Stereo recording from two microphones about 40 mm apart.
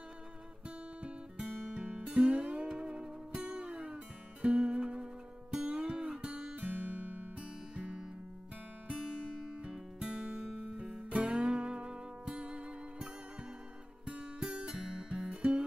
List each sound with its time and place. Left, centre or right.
1.7 s music: right
7.7 s music: right
9.7 s music: right
14.4 s music: right